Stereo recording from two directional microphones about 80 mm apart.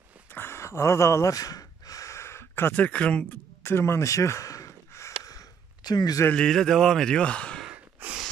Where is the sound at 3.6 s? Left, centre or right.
Left.